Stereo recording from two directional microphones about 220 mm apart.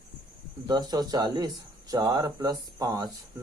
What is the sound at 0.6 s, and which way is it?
Speech, 20° right (ahead or behind).